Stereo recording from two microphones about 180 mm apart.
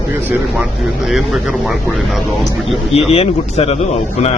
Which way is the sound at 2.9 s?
35° left (ahead or behind).